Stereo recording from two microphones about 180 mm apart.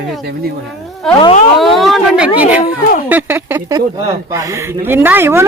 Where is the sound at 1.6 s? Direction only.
Centre (ahead or behind).